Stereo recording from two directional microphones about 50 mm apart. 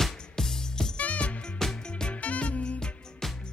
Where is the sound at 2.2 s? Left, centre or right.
Left.